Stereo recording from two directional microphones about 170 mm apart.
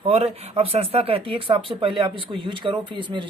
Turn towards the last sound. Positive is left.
turn(degrees=-30)  # may be behind; listen again after turning